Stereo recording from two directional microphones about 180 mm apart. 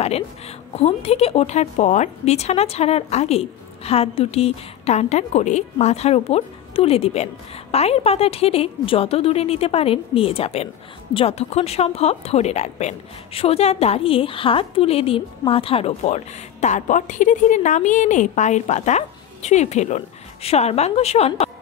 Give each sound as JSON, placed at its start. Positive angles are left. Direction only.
{"t": 0.7, "sound": "a woman's voice", "side_deg": 35}
{"t": 16.6, "sound": "a woman's voice", "side_deg": 45}